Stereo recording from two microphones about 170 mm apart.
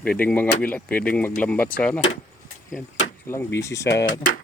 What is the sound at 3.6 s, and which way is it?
Speech, 15° left (ahead or behind).